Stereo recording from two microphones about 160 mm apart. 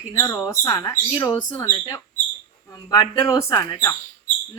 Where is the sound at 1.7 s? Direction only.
30° left (ahead or behind).